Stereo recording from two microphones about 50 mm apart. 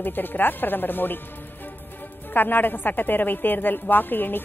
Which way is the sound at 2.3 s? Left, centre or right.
Left.